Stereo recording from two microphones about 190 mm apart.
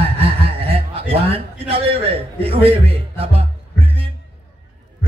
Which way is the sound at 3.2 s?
30° right (ahead or behind).